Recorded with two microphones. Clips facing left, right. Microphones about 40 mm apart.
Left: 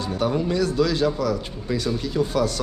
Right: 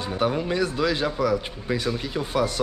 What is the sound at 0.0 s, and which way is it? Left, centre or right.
A man's voice, right.